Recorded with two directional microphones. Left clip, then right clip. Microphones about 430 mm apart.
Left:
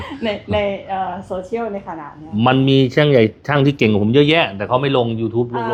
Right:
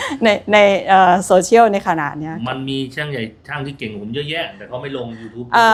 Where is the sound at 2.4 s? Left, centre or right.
Left.